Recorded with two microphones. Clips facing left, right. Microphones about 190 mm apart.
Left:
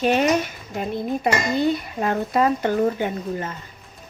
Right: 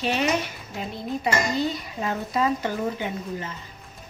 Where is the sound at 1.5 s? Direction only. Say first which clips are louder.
Left 5 dB; 55° left (ahead or behind).